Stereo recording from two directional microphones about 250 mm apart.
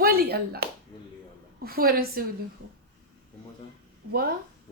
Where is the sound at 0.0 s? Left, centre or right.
Right.